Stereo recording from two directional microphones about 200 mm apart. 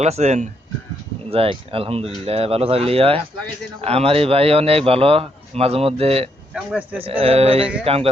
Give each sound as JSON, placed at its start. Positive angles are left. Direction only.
{"t": 0.0, "sound": "a man's voice", "side_deg": -35}
{"t": 6.5, "sound": "speech", "side_deg": -5}
{"t": 7.0, "sound": "a man's voice", "side_deg": -25}